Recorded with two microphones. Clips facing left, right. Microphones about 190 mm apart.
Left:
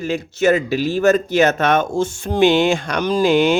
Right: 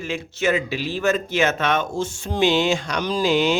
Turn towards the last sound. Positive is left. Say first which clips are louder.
# left 5 dB
turn(degrees=55)  # may be behind; listen again after turning